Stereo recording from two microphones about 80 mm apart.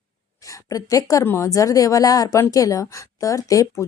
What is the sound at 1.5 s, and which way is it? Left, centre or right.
Speech, left.